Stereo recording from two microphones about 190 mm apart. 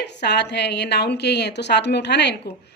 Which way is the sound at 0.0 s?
65° left (ahead or behind).